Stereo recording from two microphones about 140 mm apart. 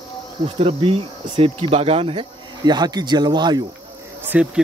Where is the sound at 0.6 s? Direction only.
40° right (ahead or behind).